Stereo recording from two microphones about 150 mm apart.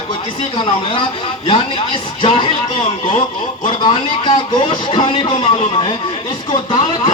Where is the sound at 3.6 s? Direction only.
35° left (ahead or behind).